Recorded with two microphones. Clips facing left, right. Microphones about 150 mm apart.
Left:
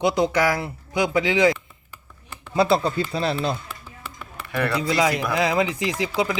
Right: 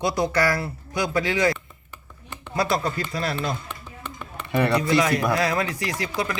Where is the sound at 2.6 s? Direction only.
30° left (ahead or behind).